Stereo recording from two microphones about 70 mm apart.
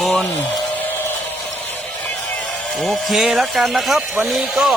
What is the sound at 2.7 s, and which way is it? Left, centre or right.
Speech, centre.